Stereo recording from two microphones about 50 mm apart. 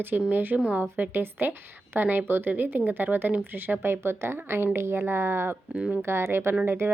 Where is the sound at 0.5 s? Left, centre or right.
Right.